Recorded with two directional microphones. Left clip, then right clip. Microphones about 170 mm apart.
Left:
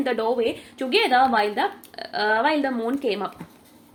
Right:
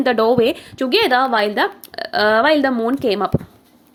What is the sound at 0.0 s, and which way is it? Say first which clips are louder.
A woman's voice: right 8 dB; 55° right (ahead or behind).